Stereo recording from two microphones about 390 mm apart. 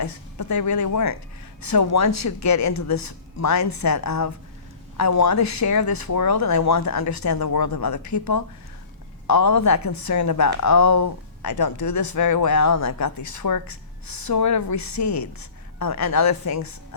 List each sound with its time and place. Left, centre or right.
0.0 s speech: left